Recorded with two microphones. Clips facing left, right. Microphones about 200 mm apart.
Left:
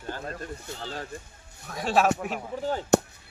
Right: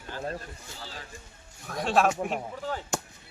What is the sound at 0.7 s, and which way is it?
Speech, 65° left (ahead or behind).